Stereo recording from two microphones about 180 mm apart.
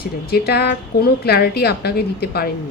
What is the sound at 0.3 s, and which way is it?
A woman's voice, 60° left (ahead or behind).